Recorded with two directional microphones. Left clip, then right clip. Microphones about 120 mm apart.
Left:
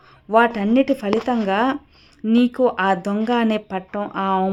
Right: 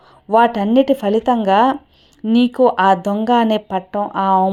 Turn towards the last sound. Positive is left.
turn(degrees=-10)  # may be behind; listen again after turning